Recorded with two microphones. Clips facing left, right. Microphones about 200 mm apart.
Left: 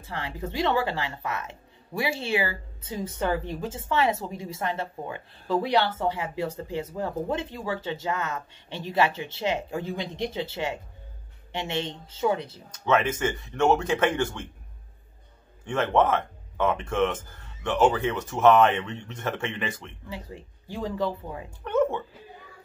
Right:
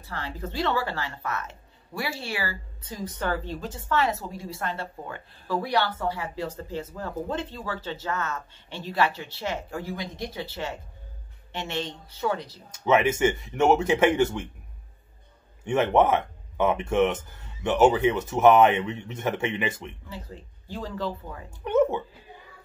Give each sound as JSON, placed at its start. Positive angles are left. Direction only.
{"t": 0.0, "sound": "speech", "side_deg": 15}
{"t": 12.8, "sound": "speech", "side_deg": -10}
{"t": 15.6, "sound": "speech", "side_deg": -15}
{"t": 20.1, "sound": "speech", "side_deg": 15}